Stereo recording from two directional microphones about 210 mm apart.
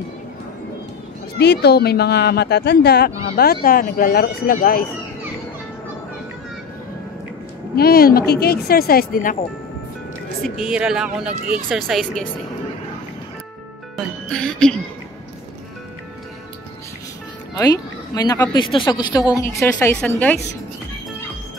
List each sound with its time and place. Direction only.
1.4 s speech: 50° left (ahead or behind)
7.7 s speech: 45° left (ahead or behind)
10.6 s speech: 5° right (ahead or behind)
13.9 s speech: 5° left (ahead or behind)
17.6 s a woman's voice: 15° left (ahead or behind)